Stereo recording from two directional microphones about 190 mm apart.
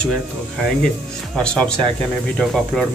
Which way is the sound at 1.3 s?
5° left (ahead or behind).